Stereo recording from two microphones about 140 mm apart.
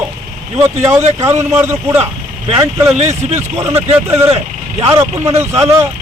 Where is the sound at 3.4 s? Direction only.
20° right (ahead or behind).